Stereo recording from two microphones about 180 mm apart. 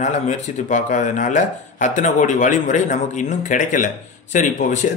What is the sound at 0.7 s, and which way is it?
Speech, 45° left (ahead or behind).